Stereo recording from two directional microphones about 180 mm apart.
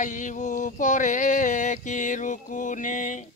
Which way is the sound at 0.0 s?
45° left (ahead or behind).